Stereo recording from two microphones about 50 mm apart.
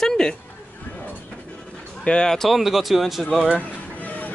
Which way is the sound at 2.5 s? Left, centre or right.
Centre.